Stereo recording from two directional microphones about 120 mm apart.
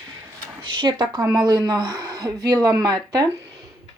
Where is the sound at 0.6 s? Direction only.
40° right (ahead or behind).